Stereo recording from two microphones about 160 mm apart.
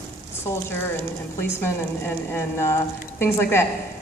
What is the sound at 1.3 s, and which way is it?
A woman's voice, 15° left (ahead or behind).